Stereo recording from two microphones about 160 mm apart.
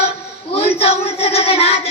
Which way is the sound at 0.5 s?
40° left (ahead or behind).